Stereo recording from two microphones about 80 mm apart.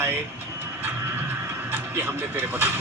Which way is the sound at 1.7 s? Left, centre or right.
Right.